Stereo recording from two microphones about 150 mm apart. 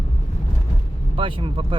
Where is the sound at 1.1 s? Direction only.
35° right (ahead or behind).